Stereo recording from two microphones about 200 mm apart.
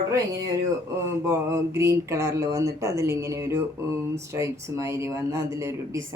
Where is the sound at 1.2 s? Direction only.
15° right (ahead or behind).